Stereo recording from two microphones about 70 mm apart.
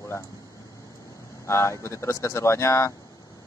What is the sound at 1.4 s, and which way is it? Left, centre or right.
Speech, left.